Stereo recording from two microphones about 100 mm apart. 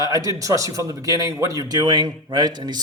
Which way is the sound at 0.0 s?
35° right (ahead or behind).